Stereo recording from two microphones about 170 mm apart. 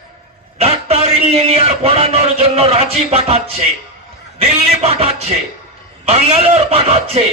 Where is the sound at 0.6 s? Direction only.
35° right (ahead or behind).